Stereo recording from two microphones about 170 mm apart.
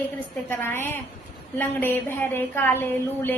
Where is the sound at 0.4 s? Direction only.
15° left (ahead or behind).